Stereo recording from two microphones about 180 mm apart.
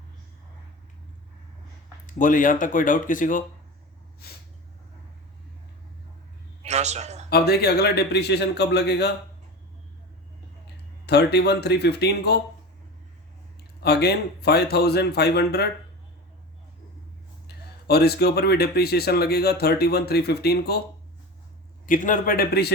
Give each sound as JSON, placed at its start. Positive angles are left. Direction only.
{"t": 2.0, "sound": "speech", "side_deg": 45}
{"t": 6.6, "sound": "a sound", "side_deg": -40}
{"t": 7.3, "sound": "speech", "side_deg": 60}
{"t": 11.0, "sound": "speech", "side_deg": 65}
{"t": 13.8, "sound": "speech", "side_deg": 65}
{"t": 17.8, "sound": "speech", "side_deg": 60}
{"t": 21.8, "sound": "speech", "side_deg": 50}